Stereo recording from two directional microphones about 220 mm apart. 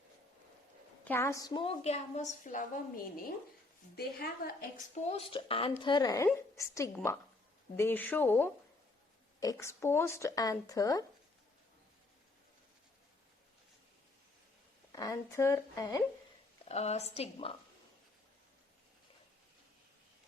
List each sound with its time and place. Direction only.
1.0 s a woman's voice: 10° left (ahead or behind); by 4.5 s 45° left (ahead or behind)
5.0 s a woman's voice: 25° left (ahead or behind)
14.9 s speech: 15° left (ahead or behind)
16.6 s a woman's voice: 30° left (ahead or behind)